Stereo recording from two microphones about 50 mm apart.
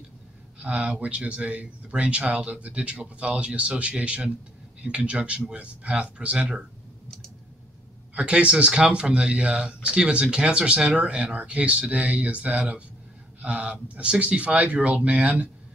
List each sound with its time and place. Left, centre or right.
0.6 s speech: right
8.1 s speech: right